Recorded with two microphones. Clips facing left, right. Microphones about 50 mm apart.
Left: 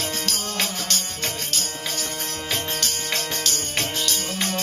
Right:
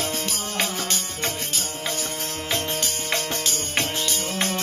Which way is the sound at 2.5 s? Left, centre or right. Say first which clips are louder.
Right 1 dB; centre.